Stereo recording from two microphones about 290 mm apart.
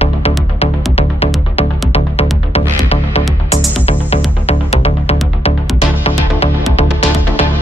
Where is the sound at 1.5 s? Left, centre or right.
Centre.